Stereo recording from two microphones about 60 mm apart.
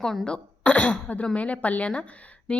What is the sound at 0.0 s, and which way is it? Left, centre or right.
Speech, centre.